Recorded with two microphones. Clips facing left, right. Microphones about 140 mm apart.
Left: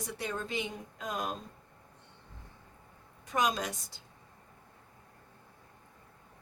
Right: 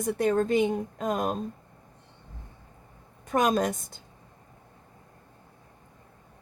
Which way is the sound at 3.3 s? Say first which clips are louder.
Right 7 dB; 50° right (ahead or behind).